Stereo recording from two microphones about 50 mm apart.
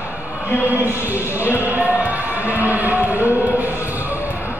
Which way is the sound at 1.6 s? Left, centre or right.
Right.